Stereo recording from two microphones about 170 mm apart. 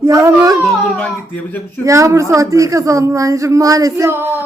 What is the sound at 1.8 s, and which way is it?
Speech, 20° right (ahead or behind).